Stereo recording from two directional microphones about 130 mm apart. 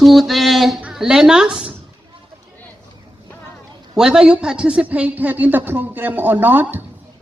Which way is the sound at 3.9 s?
5° right (ahead or behind).